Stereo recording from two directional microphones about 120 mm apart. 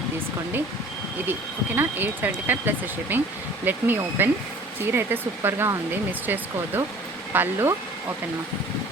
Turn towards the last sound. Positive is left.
turn(degrees=-20)  # may be behind; listen again after turning